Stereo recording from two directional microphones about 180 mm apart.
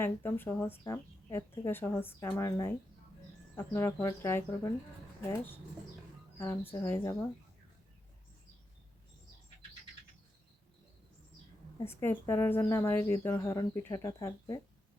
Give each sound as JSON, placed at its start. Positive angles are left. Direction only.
{"t": 0.0, "sound": "speech", "side_deg": 10}
{"t": 6.4, "sound": "speech", "side_deg": 15}
{"t": 11.9, "sound": "speech", "side_deg": 15}